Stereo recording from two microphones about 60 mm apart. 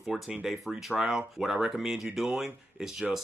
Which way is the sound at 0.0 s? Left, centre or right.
Centre.